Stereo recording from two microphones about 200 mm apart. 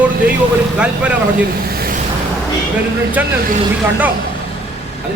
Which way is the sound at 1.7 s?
50° right (ahead or behind).